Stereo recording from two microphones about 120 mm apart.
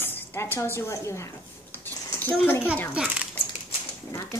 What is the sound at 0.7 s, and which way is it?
Speech, 25° left (ahead or behind).